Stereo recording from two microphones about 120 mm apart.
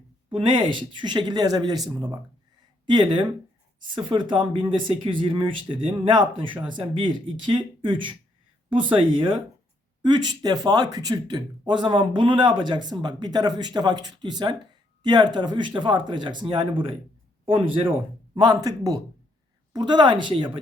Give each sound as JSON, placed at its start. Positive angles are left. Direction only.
{"t": 0.3, "sound": "speech", "side_deg": -45}
{"t": 18.3, "sound": "speech", "side_deg": -40}